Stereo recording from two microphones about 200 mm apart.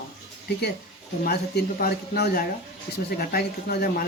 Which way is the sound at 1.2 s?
50° left (ahead or behind).